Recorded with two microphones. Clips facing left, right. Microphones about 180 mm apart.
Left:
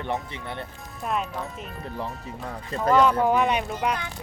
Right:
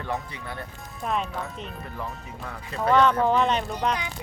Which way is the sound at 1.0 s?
Centre (ahead or behind).